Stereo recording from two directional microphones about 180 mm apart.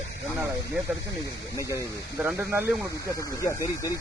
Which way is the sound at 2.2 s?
10° right (ahead or behind).